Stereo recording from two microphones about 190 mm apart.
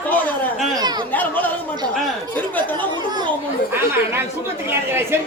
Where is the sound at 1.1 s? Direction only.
10° left (ahead or behind).